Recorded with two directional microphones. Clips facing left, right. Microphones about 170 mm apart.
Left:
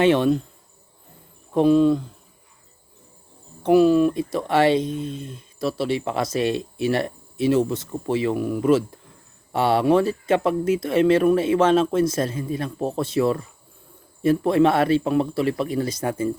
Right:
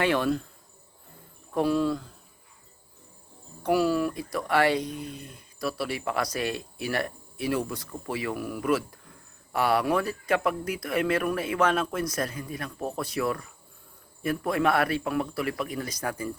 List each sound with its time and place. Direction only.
0.0 s speech: 20° left (ahead or behind)
1.5 s speech: 20° left (ahead or behind)
3.6 s speech: 20° left (ahead or behind)